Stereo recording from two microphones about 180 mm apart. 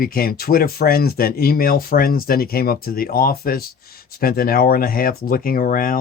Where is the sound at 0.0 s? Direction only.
55° left (ahead or behind).